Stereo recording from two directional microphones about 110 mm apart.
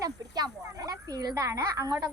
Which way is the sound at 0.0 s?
35° right (ahead or behind).